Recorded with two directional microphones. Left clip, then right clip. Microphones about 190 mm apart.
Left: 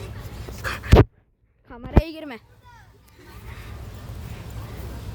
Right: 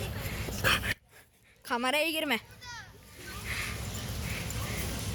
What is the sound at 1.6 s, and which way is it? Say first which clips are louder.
Speech: right 11 dB; 15° right (ahead or behind).